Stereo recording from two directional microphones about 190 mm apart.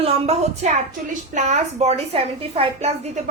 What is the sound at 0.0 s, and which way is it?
A woman's voice, 35° right (ahead or behind).